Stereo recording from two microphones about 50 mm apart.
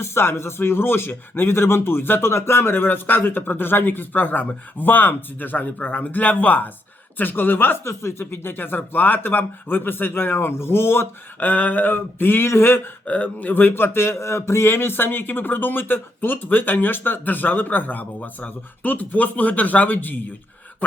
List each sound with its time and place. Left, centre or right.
0.0 s speech: left
2.2 s speech: left
11.3 s speech: left
13.1 s speech: left